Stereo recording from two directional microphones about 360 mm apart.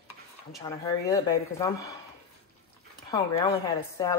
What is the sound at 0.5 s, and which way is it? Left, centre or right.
Speech, centre.